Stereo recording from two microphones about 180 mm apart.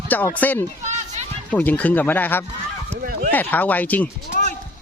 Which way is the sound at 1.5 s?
10° left (ahead or behind).